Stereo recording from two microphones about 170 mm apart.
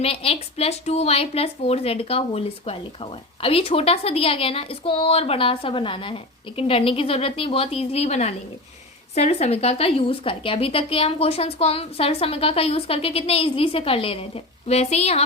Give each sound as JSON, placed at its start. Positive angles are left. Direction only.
{"t": 0.0, "sound": "speech", "side_deg": 35}